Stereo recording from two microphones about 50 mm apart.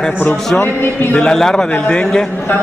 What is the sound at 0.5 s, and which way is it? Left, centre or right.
Speech, left.